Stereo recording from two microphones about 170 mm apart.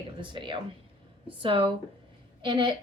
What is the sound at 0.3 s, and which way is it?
A woman's voice, 30° right (ahead or behind).